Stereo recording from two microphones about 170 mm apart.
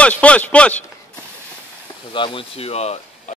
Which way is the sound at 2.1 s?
30° left (ahead or behind).